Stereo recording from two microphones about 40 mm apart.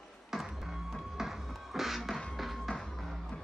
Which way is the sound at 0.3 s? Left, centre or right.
Centre.